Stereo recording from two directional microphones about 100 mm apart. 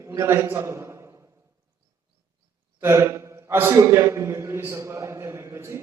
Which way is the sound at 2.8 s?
25° right (ahead or behind).